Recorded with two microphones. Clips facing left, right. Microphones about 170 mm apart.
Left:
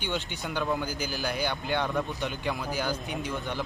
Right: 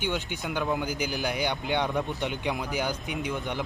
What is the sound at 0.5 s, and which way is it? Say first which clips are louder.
A man's voice: right 1 dB; 10° right (ahead or behind).